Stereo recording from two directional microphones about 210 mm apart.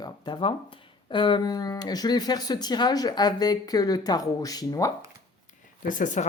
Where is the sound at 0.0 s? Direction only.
20° left (ahead or behind).